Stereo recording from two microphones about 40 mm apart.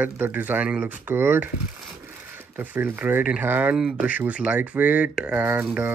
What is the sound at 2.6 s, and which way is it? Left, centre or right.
Speech, right.